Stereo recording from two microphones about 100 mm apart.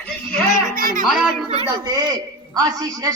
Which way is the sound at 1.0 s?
5° right (ahead or behind).